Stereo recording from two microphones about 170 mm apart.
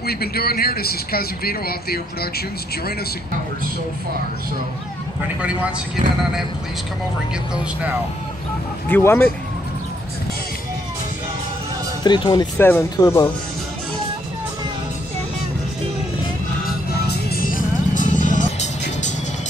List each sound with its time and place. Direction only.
0.0 s speech: 65° left (ahead or behind)
5.4 s speech: 5° right (ahead or behind)
8.8 s speech: 15° left (ahead or behind)
12.0 s speech: 25° left (ahead or behind)
12.5 s speech: 15° left (ahead or behind)
17.0 s music: 65° left (ahead or behind); by 19.1 s 45° left (ahead or behind)